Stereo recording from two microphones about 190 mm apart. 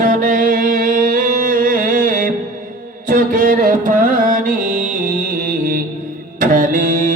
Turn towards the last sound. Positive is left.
turn(degrees=-45)  # may be behind; listen again after turning